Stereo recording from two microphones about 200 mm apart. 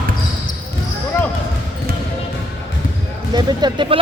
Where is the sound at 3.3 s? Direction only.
20° right (ahead or behind).